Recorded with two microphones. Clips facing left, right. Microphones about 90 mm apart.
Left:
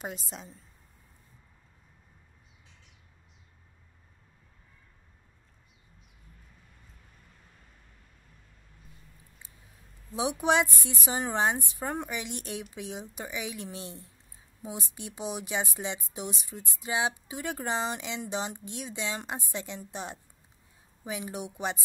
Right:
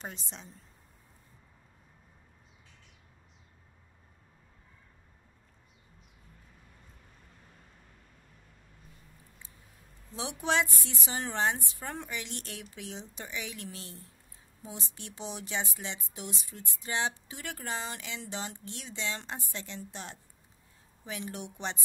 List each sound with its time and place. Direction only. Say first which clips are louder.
0.0 s a woman's voice: left 5 dB; 5° left (ahead or behind)
10.1 s a woman's voice: left 4 dB; 15° left (ahead or behind)